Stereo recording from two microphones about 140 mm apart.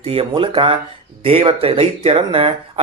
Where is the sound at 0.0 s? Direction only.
45° right (ahead or behind).